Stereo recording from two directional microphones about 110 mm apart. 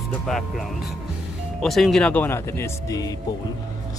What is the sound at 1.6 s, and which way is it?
Speech, centre (ahead or behind).